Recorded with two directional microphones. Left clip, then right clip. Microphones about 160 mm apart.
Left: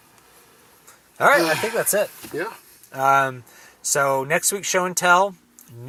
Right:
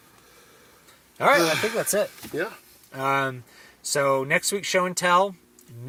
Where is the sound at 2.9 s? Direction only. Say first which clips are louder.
Left 6 dB; 40° left (ahead or behind).